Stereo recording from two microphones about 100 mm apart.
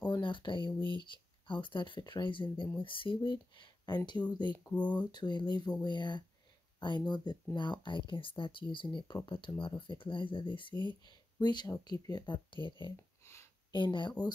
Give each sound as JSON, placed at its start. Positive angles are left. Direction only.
{"t": 0.2, "sound": "speech", "side_deg": 55}
{"t": 4.7, "sound": "speech", "side_deg": 15}
{"t": 5.1, "sound": "speech", "side_deg": 50}
{"t": 12.9, "sound": "a sound", "side_deg": 25}
{"t": 13.7, "sound": "speech", "side_deg": 50}